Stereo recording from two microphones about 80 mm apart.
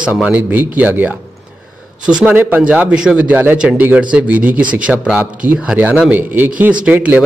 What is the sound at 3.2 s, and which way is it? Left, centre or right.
Speech, right.